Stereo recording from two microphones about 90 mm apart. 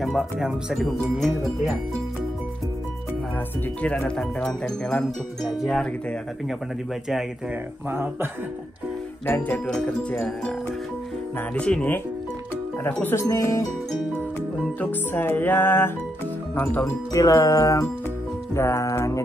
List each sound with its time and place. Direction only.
0.0 s speech: centre (ahead or behind)
3.8 s speech: 15° left (ahead or behind)
7.9 s speech: 25° right (ahead or behind)
9.2 s music: 20° left (ahead or behind)
9.7 s speech: 10° left (ahead or behind)
11.5 s speech: 15° left (ahead or behind)
12.8 s music: 20° left (ahead or behind)
13.2 s speech: 35° left (ahead or behind)
14.8 s music: 20° left (ahead or behind)
16.5 s speech: 15° left (ahead or behind)
17.1 s speech: 40° left (ahead or behind)
18.5 s music: 30° left (ahead or behind)